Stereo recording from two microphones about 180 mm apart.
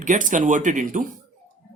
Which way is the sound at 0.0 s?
45° right (ahead or behind).